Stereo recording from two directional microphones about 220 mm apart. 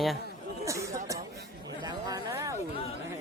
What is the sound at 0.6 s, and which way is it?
Chatter, 15° right (ahead or behind).